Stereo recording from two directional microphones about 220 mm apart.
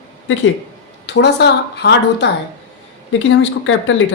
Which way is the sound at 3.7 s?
60° left (ahead or behind).